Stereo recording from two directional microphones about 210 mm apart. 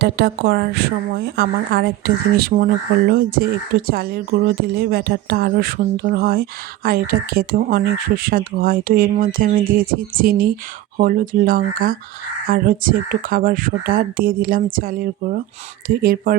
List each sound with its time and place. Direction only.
0.0 s a woman's voice: 50° right (ahead or behind)